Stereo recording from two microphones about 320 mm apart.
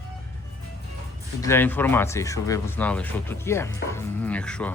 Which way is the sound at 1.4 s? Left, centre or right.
Centre.